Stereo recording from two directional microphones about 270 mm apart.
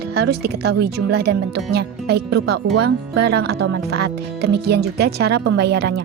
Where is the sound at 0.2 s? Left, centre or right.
Right.